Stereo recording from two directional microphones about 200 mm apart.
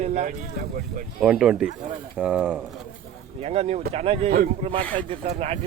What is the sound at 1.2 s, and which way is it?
Speech, 5° right (ahead or behind).